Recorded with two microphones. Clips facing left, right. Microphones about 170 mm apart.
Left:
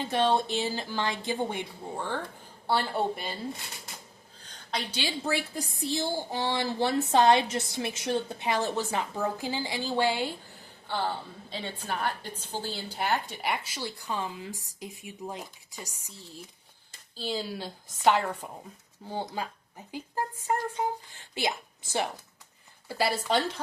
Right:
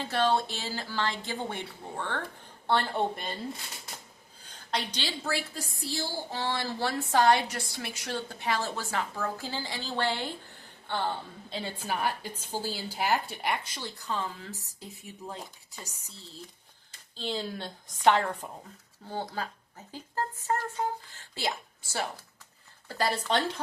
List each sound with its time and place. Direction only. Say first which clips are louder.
0.0 s a woman's voice: left 1 dB; 15° left (ahead or behind)
4.7 s a woman's voice: left 1 dB; 10° left (ahead or behind)
11.4 s a woman's voice: right 1 dB; centre (ahead or behind); by 21.5 s 15° left (ahead or behind)
22.9 s a woman's voice: left 1 dB; 10° left (ahead or behind)